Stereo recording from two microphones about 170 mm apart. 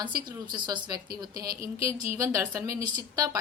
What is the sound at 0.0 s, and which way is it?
A woman's voice, 30° right (ahead or behind).